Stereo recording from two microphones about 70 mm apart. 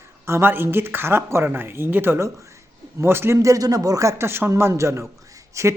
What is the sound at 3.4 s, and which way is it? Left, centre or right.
Speech, right.